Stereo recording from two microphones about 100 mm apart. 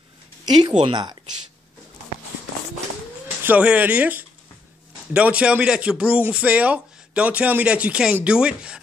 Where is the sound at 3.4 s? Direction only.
15° right (ahead or behind).